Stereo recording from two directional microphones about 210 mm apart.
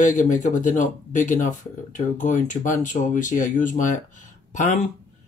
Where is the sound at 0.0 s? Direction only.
35° left (ahead or behind).